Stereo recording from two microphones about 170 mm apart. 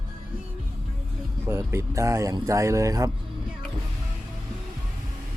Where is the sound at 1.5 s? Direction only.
15° right (ahead or behind).